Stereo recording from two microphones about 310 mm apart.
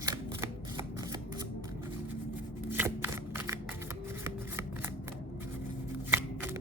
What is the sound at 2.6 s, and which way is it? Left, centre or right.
Shuffling cards, centre.